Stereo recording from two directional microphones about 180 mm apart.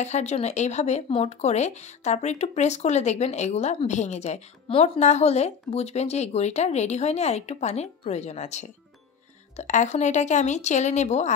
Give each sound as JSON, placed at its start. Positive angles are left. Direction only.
{"t": 0.0, "sound": "speech", "side_deg": 40}